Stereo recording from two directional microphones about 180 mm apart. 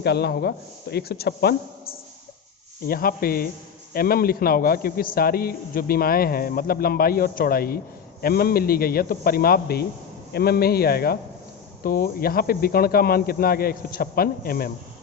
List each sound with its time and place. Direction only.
0.0 s a man's voice: 65° left (ahead or behind)